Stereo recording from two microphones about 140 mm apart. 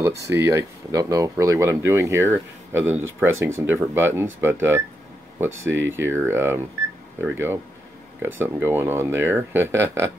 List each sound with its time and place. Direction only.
0.0 s speech: 20° right (ahead or behind)